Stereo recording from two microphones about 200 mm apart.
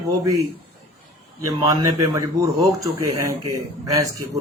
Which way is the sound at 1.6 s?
20° right (ahead or behind).